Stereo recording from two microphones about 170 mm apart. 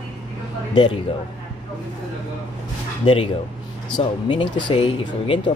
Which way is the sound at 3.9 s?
30° left (ahead or behind).